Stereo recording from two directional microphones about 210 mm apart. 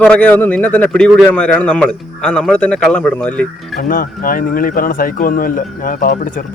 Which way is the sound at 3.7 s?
40° left (ahead or behind).